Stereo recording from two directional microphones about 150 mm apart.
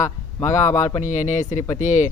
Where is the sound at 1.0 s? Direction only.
55° left (ahead or behind).